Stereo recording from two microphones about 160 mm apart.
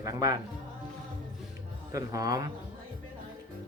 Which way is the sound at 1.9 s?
20° right (ahead or behind).